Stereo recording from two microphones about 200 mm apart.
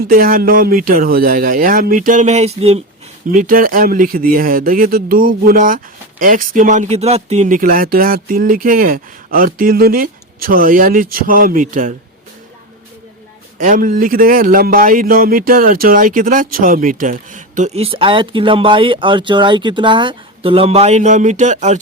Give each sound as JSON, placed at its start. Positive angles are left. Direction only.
{"t": 0.1, "sound": "speech", "side_deg": -45}
{"t": 3.3, "sound": "speech", "side_deg": -45}
{"t": 13.6, "sound": "speech", "side_deg": -40}